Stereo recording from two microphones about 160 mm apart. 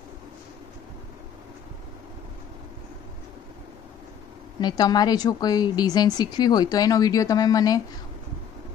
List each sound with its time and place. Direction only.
4.6 s a woman's voice: 25° left (ahead or behind)